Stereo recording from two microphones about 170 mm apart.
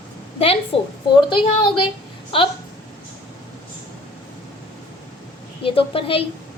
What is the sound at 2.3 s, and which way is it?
Speech, 30° left (ahead or behind).